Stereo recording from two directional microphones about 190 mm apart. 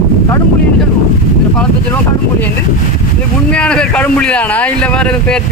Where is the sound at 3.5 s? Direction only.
5° left (ahead or behind).